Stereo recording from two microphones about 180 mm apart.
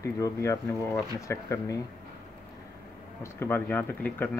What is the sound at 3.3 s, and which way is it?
Speech, 10° left (ahead or behind).